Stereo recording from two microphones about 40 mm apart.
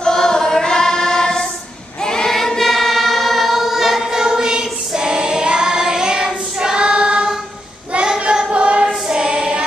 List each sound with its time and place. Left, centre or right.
0.0 s choir: centre
4.2 s singing: centre
7.9 s choir: right
9.0 s choir: centre